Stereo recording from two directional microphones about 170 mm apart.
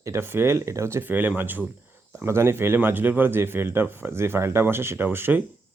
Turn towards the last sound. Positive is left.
turn(degrees=-10)  # may be behind; listen again after turning